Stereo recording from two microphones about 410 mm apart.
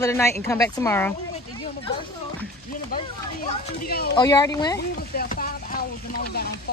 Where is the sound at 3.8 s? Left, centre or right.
Left.